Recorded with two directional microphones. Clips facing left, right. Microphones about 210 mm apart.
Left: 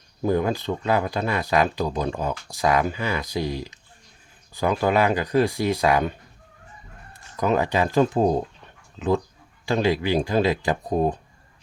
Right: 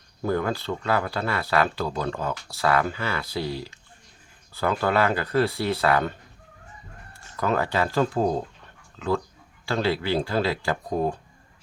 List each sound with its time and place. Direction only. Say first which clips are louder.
0.2 s speech: left 3 dB; 15° left (ahead or behind)